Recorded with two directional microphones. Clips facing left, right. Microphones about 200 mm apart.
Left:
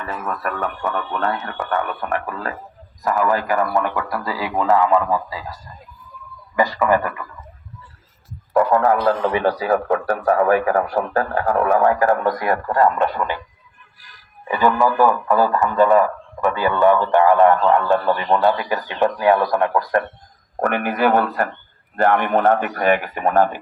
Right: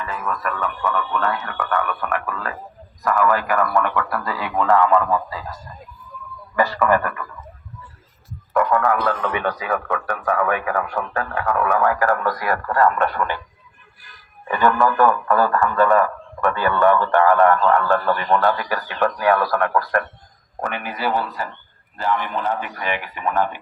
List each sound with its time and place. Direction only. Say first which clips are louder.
0.0 s speech: even; 35° left (ahead or behind)
1.2 s a man's voice: left 1 dB; 30° left (ahead or behind); by 5.5 s 10° left (ahead or behind)
6.6 s a man's voice: left 1 dB; 15° left (ahead or behind)
9.0 s a man's voice: left 5 dB; 30° left (ahead or behind); by 13.4 s 15° left (ahead or behind)
14.4 s a man's voice: left 1 dB; 10° left (ahead or behind)
20.6 s a man's voice: left 8 dB; 55° left (ahead or behind)